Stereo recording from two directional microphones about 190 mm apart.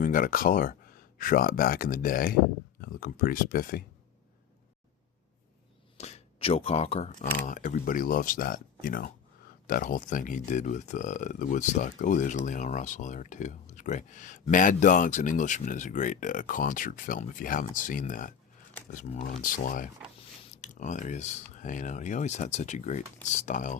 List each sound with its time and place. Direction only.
0.0 s speech: 45° left (ahead or behind)
6.0 s speech: 35° left (ahead or behind)
7.3 s speech: 45° left (ahead or behind)
20.1 s speech: 35° left (ahead or behind)